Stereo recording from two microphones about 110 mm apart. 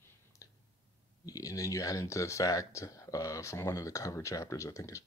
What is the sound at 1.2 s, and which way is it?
Speech, 30° left (ahead or behind).